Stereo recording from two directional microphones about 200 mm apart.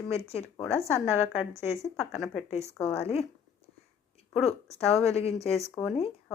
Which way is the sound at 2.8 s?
30° left (ahead or behind).